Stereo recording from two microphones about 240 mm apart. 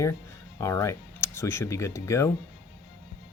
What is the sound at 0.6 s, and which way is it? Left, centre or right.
Speech, centre.